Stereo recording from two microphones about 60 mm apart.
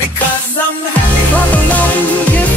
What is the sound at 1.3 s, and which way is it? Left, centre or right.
Music, left.